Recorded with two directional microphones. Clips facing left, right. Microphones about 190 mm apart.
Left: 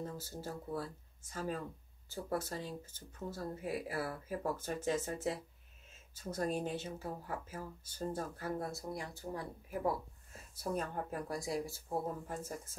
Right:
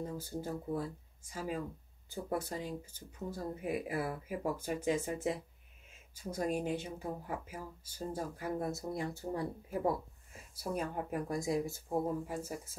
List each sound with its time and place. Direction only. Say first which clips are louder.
0.2 s speech: right 5 dB; 15° right (ahead or behind)
10.3 s speech: even; 10° right (ahead or behind)